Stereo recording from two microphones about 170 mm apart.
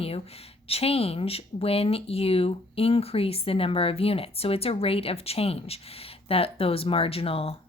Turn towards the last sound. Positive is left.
turn(degrees=35)  # may be behind; listen again after turning